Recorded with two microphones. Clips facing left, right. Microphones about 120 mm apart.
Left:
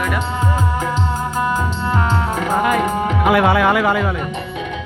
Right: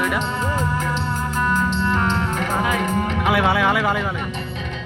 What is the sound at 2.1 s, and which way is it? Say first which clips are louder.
Music: left 4 dB; 40° left (ahead or behind).